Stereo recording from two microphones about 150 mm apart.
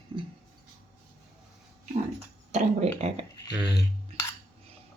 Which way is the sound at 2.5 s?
45° right (ahead or behind).